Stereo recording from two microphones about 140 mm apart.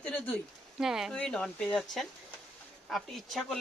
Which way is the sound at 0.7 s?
5° right (ahead or behind).